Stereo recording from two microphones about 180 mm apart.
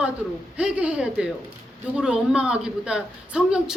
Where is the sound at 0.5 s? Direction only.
5° right (ahead or behind).